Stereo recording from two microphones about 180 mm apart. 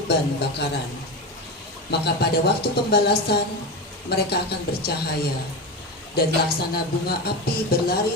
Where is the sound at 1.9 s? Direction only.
65° left (ahead or behind).